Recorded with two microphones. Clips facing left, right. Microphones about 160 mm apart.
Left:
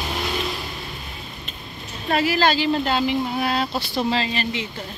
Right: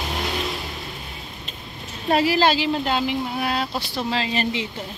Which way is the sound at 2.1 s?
30° right (ahead or behind).